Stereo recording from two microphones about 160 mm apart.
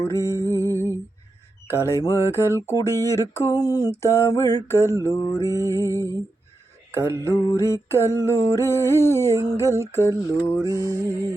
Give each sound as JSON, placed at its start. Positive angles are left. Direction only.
{"t": 0.0, "sound": "mantra", "side_deg": 20}
{"t": 0.4, "sound": "humming", "side_deg": 15}
{"t": 1.6, "sound": "mantra", "side_deg": 15}
{"t": 6.9, "sound": "mantra", "side_deg": -15}
{"t": 7.3, "sound": "mantra", "side_deg": 15}
{"t": 10.6, "sound": "music", "side_deg": -20}